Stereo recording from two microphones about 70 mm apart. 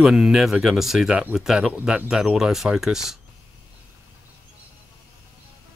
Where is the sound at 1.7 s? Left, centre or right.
Right.